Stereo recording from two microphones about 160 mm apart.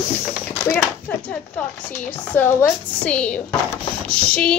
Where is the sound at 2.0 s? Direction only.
10° left (ahead or behind).